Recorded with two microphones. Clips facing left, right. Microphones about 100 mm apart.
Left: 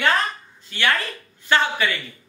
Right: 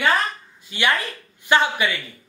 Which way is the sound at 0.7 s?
15° right (ahead or behind).